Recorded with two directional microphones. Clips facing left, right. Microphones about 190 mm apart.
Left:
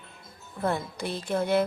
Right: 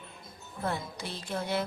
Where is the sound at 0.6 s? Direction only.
55° left (ahead or behind).